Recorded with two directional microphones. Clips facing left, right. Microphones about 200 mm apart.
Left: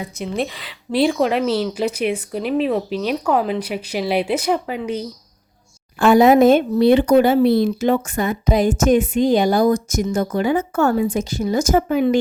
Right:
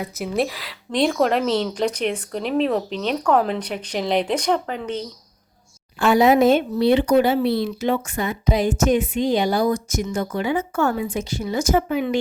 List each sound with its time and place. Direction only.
0.0 s a woman's voice: 5° right (ahead or behind)
6.0 s speech: 50° left (ahead or behind)